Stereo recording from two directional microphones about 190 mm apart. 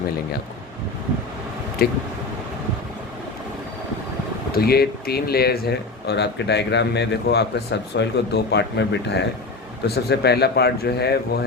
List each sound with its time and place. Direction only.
1.8 s speech: 55° left (ahead or behind)
4.5 s speech: 55° left (ahead or behind)